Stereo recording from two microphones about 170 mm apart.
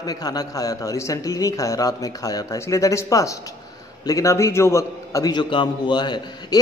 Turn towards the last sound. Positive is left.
turn(degrees=25)  # may be behind; listen again after turning